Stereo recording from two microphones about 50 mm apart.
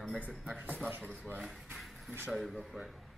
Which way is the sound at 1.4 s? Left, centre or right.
Centre.